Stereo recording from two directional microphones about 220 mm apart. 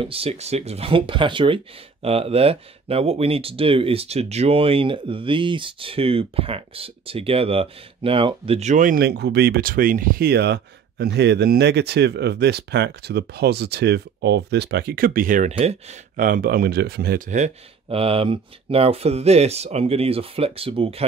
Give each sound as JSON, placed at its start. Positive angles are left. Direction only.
{"t": 0.0, "sound": "speech", "side_deg": -25}
{"t": 17.4, "sound": "speech", "side_deg": -25}